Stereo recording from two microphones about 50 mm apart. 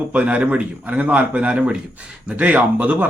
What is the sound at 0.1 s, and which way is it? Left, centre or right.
Speech, right.